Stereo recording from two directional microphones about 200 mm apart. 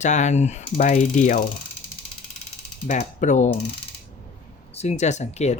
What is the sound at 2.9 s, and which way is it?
Mechanisms, 40° left (ahead or behind).